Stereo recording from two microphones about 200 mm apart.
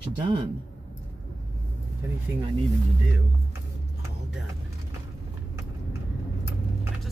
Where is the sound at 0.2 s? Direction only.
20° right (ahead or behind).